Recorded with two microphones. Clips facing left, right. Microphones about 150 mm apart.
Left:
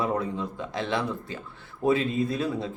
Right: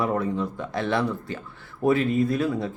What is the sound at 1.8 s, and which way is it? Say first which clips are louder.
Speech: right 3 dB; 20° left (ahead or behind).